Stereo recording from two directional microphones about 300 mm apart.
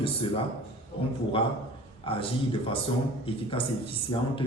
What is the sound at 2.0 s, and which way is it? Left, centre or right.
Speech, centre.